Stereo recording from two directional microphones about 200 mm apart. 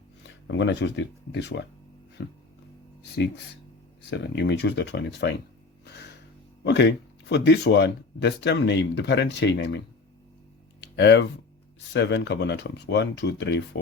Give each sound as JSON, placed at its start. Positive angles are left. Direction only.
{"t": 0.2, "sound": "speech", "side_deg": 65}
{"t": 4.1, "sound": "speech", "side_deg": 60}
{"t": 5.8, "sound": "a sound", "side_deg": 55}
{"t": 6.7, "sound": "speech", "side_deg": 60}
{"t": 10.9, "sound": "speech", "side_deg": 60}